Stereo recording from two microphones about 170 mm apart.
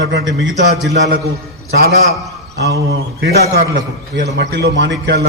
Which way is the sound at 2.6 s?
80° right.